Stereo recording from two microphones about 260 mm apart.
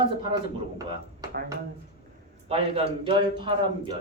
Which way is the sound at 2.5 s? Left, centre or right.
Right.